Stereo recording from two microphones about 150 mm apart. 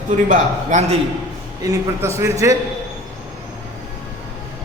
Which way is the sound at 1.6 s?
20° right (ahead or behind).